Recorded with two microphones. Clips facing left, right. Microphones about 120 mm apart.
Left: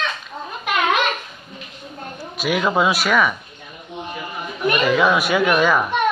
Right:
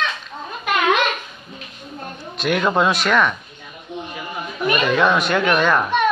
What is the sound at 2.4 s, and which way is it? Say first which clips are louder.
Speech: right 1 dB; 5° left (ahead or behind).